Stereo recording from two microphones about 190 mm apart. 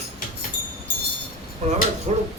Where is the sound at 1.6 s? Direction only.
35° right (ahead or behind).